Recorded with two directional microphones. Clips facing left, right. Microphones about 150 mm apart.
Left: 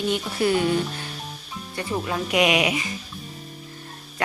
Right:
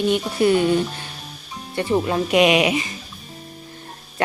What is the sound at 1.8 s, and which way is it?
Speech, 30° right (ahead or behind).